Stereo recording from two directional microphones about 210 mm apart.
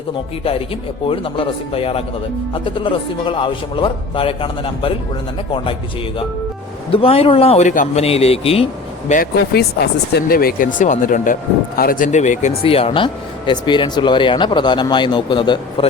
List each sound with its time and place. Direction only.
1.0 s speech: 25° left (ahead or behind)
6.9 s speech: 25° left (ahead or behind)